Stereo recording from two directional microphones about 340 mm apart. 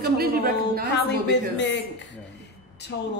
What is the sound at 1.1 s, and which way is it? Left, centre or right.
Speech, left.